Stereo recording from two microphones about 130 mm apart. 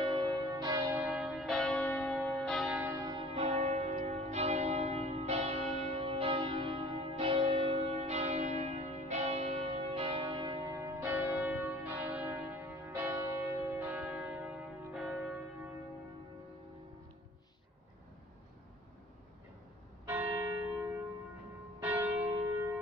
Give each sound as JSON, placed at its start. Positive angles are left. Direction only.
{"t": 0.0, "sound": "church bell", "side_deg": -40}
{"t": 0.4, "sound": "church bell", "side_deg": -30}
{"t": 1.1, "sound": "church bell", "side_deg": 0}
{"t": 2.7, "sound": "church bell", "side_deg": -15}
{"t": 3.0, "sound": "church bell", "side_deg": -35}
{"t": 3.3, "sound": "church bell", "side_deg": -55}
{"t": 20.1, "sound": "church bell", "side_deg": -15}
{"t": 21.8, "sound": "church bell", "side_deg": -10}